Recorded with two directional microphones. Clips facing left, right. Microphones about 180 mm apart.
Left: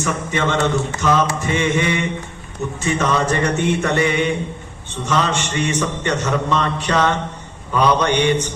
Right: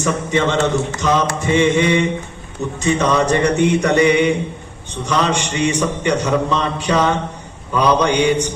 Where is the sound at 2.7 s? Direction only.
20° right (ahead or behind).